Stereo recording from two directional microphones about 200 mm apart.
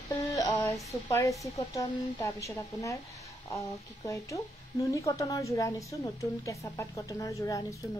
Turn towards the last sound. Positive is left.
turn(degrees=15)  # may be behind; listen again after turning